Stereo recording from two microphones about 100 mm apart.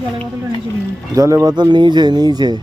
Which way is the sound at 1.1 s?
35° right (ahead or behind).